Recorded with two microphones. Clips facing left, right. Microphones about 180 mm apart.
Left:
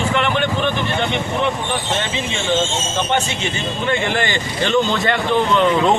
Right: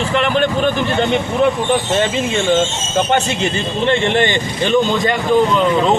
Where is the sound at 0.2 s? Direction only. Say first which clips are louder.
Right 3 dB; 40° right (ahead or behind).